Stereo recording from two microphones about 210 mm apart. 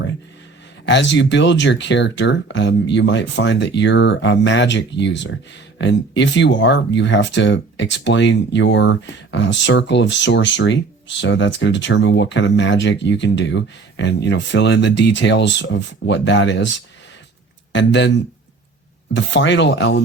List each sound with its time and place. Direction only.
0.9 s speech: 55° left (ahead or behind)
17.7 s speech: 60° left (ahead or behind)